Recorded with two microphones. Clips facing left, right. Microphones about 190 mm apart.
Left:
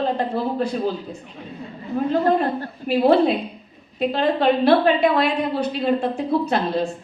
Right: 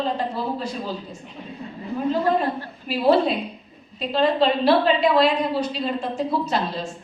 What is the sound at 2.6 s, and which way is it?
A woman's voice, 55° left (ahead or behind).